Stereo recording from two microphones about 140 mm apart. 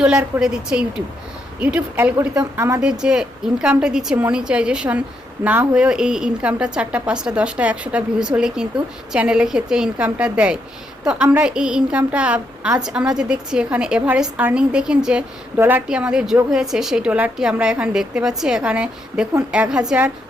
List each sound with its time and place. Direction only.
0.3 s a woman's voice: 5° right (ahead or behind)
2.8 s a woman's voice: 5° right (ahead or behind)